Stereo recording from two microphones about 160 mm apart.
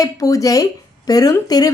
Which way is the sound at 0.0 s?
20° left (ahead or behind).